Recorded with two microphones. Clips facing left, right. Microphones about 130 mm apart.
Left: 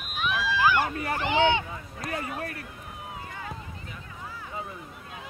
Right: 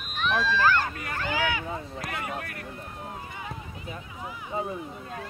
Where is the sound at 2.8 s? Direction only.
5° left (ahead or behind).